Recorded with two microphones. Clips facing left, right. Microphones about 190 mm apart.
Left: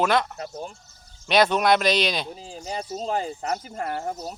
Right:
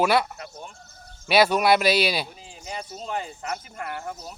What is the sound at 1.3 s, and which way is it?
Speech, 5° right (ahead or behind).